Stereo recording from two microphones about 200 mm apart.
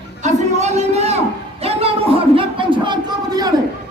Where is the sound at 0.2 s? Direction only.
35° right (ahead or behind).